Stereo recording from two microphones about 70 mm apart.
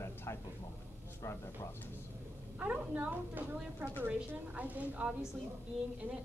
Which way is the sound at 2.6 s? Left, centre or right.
Centre.